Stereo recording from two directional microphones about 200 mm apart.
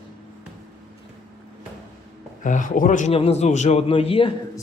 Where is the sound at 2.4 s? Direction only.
40° left (ahead or behind).